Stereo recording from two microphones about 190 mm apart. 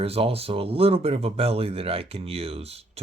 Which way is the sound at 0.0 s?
30° right (ahead or behind).